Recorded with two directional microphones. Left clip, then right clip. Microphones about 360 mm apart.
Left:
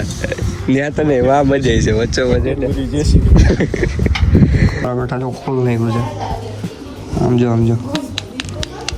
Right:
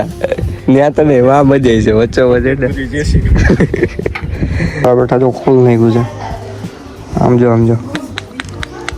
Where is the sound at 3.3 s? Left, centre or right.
Centre.